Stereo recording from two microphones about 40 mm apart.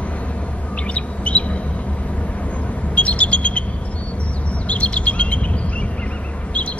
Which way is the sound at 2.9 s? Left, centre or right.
Left.